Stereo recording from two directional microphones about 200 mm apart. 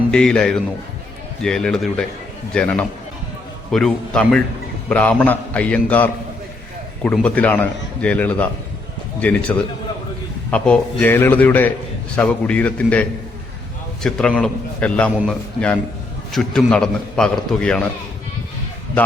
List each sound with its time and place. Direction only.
0.1 s a man's voice: 5° left (ahead or behind)
9.5 s a man's voice: 15° left (ahead or behind)
19.0 s a man's voice: 10° left (ahead or behind)